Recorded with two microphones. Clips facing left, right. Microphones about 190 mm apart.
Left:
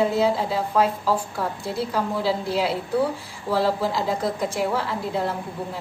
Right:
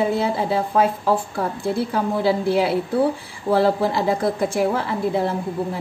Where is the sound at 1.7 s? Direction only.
55° right (ahead or behind).